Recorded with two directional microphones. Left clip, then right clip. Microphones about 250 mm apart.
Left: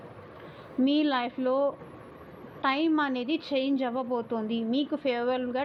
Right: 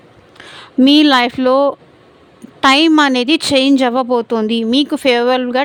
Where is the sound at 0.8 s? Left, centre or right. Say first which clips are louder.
Right 17 dB; right.